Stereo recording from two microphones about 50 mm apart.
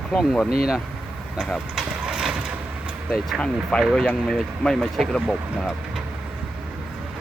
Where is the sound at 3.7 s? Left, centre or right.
Left.